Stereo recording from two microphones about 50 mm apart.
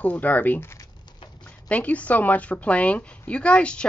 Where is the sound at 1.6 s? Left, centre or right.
Left.